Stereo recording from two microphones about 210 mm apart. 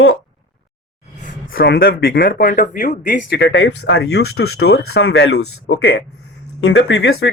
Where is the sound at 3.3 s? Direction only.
55° left (ahead or behind).